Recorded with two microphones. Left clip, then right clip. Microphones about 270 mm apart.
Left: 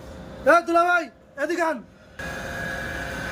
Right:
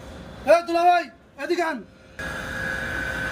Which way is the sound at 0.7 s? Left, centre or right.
Centre.